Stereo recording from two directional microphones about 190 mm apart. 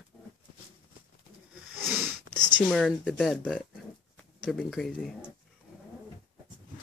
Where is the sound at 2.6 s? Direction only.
Centre (ahead or behind).